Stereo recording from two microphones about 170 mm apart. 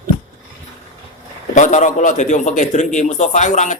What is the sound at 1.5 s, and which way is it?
A man's voice, 45° left (ahead or behind).